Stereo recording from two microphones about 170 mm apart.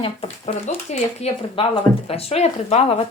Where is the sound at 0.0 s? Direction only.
35° left (ahead or behind).